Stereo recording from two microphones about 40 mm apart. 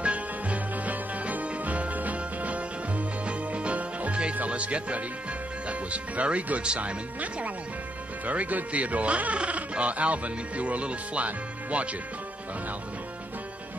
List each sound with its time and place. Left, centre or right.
0.0 s music: right
4.5 s speech: right
7.2 s speech: right